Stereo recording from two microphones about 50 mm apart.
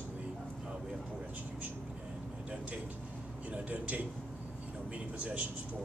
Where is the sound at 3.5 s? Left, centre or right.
Right.